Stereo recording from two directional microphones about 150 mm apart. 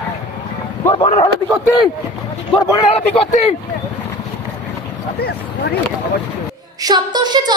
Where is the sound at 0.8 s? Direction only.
35° left (ahead or behind).